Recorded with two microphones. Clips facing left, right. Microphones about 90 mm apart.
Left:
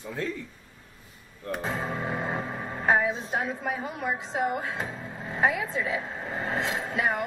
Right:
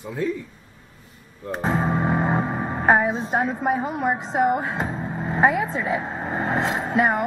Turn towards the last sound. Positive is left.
turn(degrees=-40)  # may be behind; listen again after turning